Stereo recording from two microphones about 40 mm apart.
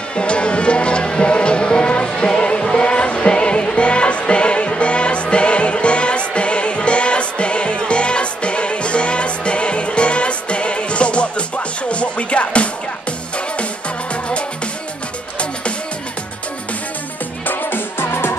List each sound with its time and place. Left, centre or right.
0.1 s music: left
17.5 s music: left